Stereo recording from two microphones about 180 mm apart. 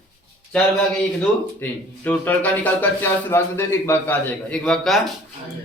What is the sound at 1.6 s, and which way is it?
Speech, 10° left (ahead or behind).